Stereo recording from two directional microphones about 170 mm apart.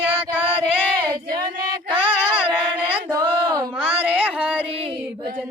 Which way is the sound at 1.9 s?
10° right (ahead or behind).